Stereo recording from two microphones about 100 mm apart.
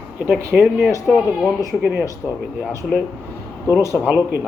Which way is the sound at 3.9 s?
15° right (ahead or behind).